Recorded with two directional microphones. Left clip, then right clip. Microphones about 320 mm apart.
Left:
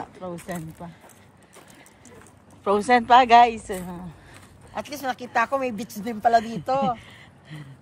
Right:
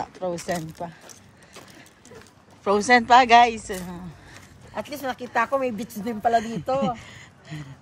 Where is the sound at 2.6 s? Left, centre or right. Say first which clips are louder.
Right 1 dB; centre.